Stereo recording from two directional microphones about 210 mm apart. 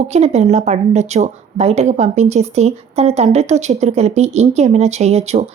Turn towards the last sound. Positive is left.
turn(degrees=-30)  # may be behind; listen again after turning